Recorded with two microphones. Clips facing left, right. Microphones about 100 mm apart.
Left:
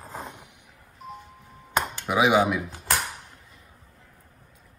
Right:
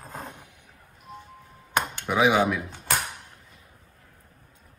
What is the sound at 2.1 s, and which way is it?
Speech, 10° left (ahead or behind).